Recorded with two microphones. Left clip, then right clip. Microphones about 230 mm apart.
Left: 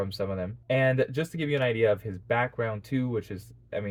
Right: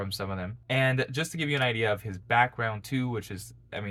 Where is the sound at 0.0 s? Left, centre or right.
Centre.